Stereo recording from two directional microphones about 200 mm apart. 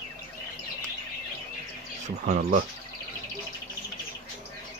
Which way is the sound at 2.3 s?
40° right (ahead or behind).